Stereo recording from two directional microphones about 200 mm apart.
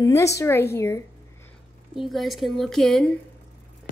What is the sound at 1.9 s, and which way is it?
A woman's voice, centre (ahead or behind).